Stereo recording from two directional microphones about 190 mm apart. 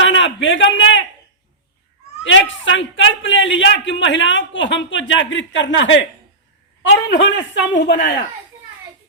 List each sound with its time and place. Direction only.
0.0 s a sound: 80° left
2.2 s a man's voice: 80° left
7.1 s speech: 70° left (ahead or behind)